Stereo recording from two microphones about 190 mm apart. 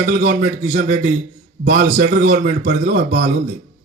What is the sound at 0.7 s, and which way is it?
A man's voice, 40° right (ahead or behind).